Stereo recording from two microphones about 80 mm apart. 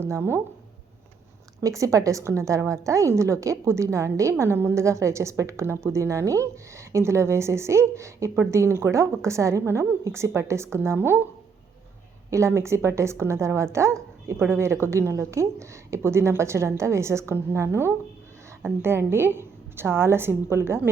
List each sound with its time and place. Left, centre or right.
0.0 s a woman's voice: right
1.6 s a woman's voice: right
12.3 s a woman's voice: right